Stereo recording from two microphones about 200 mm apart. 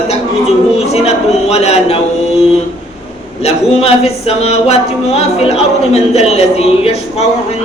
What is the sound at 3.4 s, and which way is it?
Speech, 30° left (ahead or behind).